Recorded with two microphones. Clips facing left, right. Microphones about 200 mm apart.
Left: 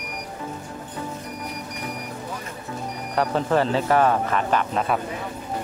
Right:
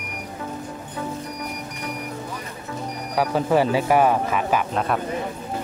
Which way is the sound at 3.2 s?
10° right (ahead or behind).